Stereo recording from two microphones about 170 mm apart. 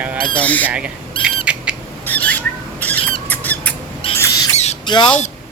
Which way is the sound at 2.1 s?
10° left (ahead or behind).